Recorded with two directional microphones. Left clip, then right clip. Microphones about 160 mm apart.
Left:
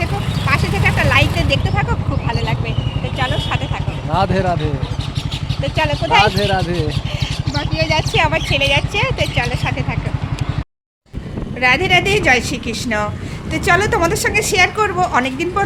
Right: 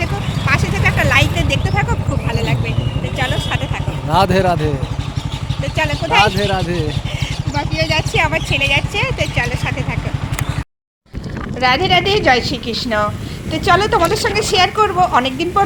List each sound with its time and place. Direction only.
0.0 s vehicle: 5° right (ahead or behind)
4.1 s speech: 75° right (ahead or behind)
5.6 s speech: 15° left (ahead or behind)
6.2 s speech: 5° right (ahead or behind)
7.8 s speech: 20° left (ahead or behind)
11.6 s speech: 5° left (ahead or behind)